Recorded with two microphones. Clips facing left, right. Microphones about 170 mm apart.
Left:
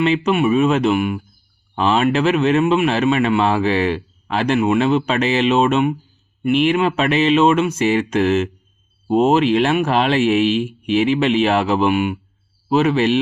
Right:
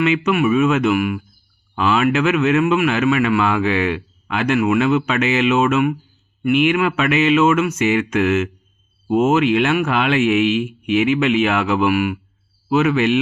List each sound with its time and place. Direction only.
0.0 s speech: 30° left (ahead or behind)